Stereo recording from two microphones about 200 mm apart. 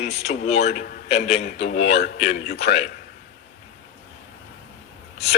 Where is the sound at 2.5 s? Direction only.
55° left (ahead or behind).